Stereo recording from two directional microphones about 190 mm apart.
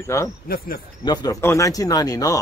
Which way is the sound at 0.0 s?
15° left (ahead or behind).